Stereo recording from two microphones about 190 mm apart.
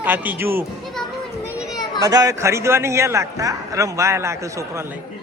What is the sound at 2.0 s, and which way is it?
A man's voice, 20° right (ahead or behind).